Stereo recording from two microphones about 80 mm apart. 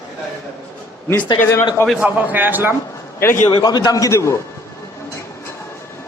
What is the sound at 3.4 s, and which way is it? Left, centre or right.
Speech, left.